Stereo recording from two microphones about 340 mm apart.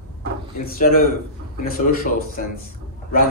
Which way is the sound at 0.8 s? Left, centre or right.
Left.